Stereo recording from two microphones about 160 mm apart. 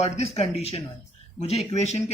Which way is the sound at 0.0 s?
40° left (ahead or behind).